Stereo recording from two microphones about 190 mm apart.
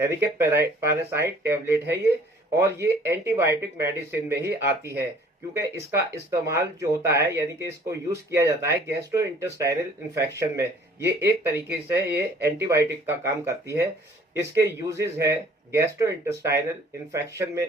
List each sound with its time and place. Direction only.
0.0 s speech: 15° right (ahead or behind)